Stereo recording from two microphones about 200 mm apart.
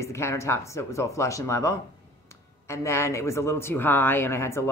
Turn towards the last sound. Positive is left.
turn(degrees=15)  # may be behind; listen again after turning